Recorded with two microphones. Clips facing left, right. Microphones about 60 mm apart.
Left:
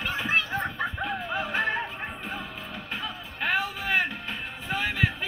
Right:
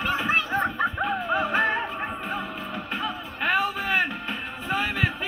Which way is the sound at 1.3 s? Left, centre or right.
Right.